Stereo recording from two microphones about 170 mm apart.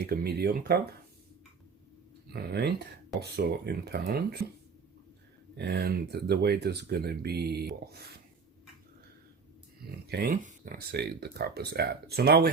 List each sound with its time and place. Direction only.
0.0 s speech: 65° right (ahead or behind)
2.3 s speech: 70° right (ahead or behind)
5.5 s speech: 75° right (ahead or behind)
9.8 s speech: 65° right (ahead or behind)